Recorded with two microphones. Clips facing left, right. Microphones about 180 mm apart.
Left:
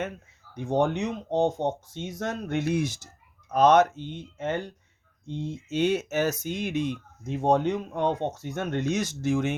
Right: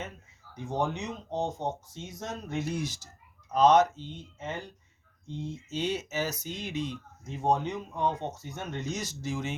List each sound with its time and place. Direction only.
0.5 s speech: 65° left (ahead or behind)
5.7 s speech: 55° left (ahead or behind)